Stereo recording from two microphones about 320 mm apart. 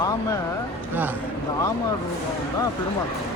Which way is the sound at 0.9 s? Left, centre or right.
Centre.